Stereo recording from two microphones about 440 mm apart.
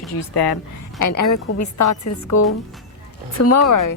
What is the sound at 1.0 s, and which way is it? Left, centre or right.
A woman's voice, left.